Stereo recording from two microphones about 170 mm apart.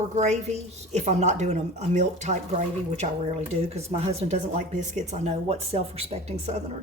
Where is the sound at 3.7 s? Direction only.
40° right (ahead or behind).